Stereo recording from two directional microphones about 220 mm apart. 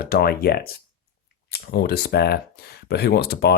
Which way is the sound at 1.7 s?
45° left (ahead or behind).